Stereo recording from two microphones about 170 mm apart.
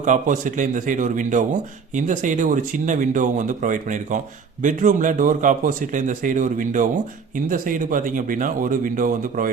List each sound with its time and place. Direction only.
0.0 s speech: 50° right (ahead or behind)